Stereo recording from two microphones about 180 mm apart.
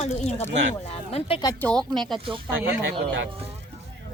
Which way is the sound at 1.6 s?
5° left (ahead or behind).